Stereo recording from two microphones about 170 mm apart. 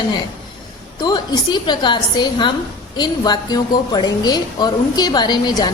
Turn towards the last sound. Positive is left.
turn(degrees=25)  # may be behind; listen again after turning